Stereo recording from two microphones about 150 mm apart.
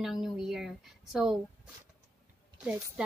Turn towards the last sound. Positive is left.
turn(degrees=-10)  # may be behind; listen again after turning